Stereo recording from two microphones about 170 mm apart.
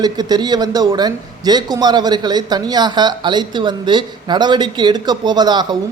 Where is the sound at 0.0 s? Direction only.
25° right (ahead or behind).